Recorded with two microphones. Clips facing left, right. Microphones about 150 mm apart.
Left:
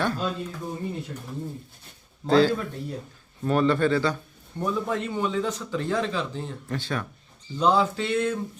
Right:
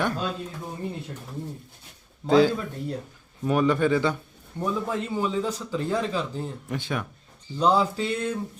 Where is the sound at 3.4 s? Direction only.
10° right (ahead or behind).